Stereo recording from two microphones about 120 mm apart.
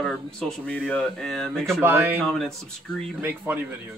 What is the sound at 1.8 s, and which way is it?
Speech, 20° right (ahead or behind).